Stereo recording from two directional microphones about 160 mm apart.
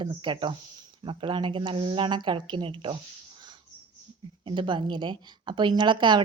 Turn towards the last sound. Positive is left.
turn(degrees=-30)  # may be behind; listen again after turning